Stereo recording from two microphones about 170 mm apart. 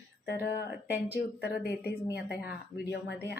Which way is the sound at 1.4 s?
75° left (ahead or behind).